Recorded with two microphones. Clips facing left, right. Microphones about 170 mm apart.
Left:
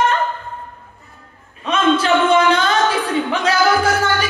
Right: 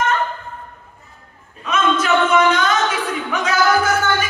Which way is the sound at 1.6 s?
30° left (ahead or behind).